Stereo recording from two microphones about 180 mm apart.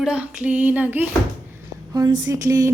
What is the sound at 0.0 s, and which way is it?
A woman's voice, 5° right (ahead or behind).